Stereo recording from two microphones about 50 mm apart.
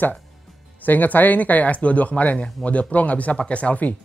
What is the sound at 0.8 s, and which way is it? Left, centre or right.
Speech, left.